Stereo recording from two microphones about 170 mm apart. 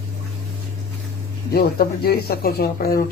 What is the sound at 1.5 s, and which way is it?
Speech, 65° left (ahead or behind).